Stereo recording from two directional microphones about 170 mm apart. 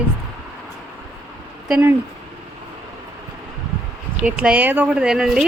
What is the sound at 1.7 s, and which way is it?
Speech, 10° right (ahead or behind).